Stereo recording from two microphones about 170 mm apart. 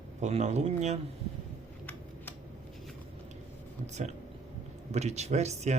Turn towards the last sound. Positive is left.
turn(degrees=-40)  # may be behind; listen again after turning